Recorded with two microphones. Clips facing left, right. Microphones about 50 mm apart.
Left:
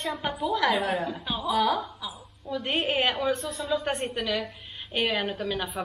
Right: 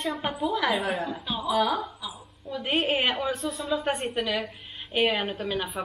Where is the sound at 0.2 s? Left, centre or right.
Centre.